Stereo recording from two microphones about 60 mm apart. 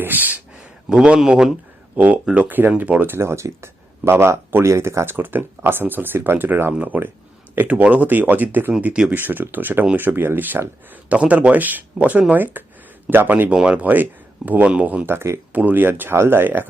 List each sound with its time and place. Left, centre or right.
0.0 s speech: right
0.6 s speech: centre
2.0 s speech: right
3.2 s speech: right
13.5 s speech: centre
13.8 s speech: right
15.0 s speech: right
15.5 s speech: right